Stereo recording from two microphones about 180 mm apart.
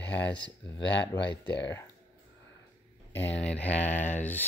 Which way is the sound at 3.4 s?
10° left (ahead or behind).